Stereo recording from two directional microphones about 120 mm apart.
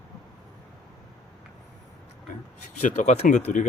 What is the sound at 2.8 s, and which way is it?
Speech, 75° left (ahead or behind).